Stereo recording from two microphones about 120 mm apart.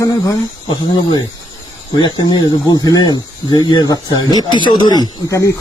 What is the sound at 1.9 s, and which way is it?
Speech, 40° left (ahead or behind).